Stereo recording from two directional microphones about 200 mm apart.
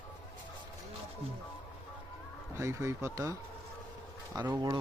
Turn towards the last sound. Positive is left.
turn(degrees=-20)  # may be behind; listen again after turning